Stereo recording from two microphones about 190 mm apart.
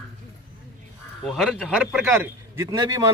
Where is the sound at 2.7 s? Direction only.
20° right (ahead or behind).